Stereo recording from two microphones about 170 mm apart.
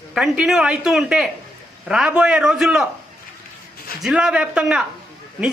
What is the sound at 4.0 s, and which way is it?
Speech, centre (ahead or behind).